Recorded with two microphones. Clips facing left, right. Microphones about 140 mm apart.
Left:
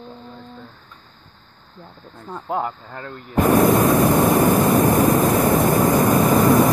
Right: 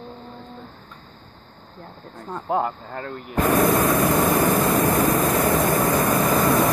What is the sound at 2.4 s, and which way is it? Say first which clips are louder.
Speech: right 1 dB; 15° right (ahead or behind).